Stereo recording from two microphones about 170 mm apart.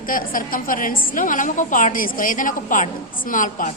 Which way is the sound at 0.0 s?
55° left (ahead or behind).